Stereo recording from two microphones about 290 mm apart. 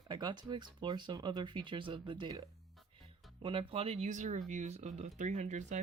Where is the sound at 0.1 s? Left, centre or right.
Centre.